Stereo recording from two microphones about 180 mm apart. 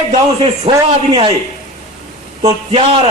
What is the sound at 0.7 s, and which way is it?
Speech, 30° right (ahead or behind).